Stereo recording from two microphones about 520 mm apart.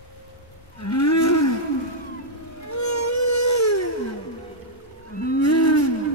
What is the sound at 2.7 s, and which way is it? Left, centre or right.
Music, left.